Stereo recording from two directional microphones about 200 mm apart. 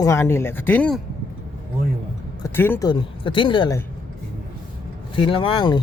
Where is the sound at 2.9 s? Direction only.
25° left (ahead or behind).